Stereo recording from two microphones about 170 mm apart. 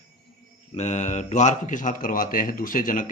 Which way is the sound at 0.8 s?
45° left (ahead or behind).